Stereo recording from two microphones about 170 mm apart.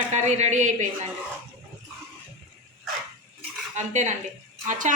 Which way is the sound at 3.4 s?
45° right (ahead or behind).